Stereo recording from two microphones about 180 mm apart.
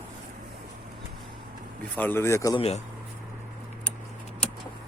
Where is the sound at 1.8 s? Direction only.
10° left (ahead or behind).